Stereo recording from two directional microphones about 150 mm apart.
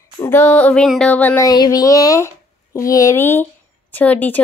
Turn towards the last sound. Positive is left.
turn(degrees=10)  # may be behind; listen again after turning